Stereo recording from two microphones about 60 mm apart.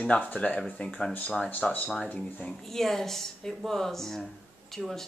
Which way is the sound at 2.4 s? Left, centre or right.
Centre.